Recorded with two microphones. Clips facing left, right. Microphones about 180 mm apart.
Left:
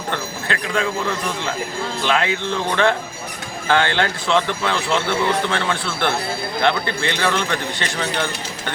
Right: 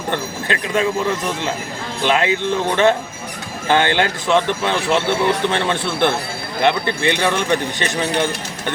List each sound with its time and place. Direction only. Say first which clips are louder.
0.1 s speech: right 3 dB; 20° right (ahead or behind)